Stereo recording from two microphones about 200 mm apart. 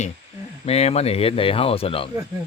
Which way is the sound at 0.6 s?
30° left (ahead or behind).